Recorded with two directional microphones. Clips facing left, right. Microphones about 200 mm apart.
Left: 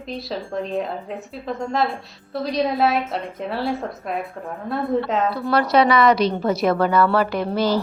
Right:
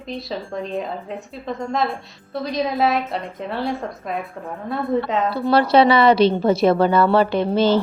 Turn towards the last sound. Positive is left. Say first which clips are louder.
# right 3 dB
turn(degrees=-25)  # may be behind; listen again after turning